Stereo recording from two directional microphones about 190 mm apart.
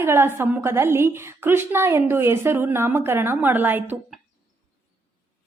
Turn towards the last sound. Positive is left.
turn(degrees=-10)  # may be behind; listen again after turning